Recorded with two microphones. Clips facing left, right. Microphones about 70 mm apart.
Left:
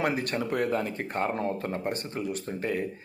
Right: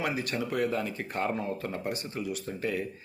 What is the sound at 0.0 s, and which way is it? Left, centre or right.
Speech, left.